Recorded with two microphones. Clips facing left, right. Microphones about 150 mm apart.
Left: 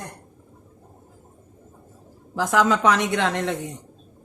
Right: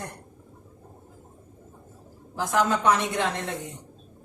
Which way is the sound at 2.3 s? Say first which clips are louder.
Left 4 dB; 90° left.